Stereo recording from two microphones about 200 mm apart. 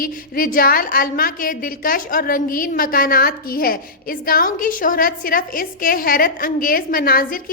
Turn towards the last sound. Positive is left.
turn(degrees=45)  # may be behind; listen again after turning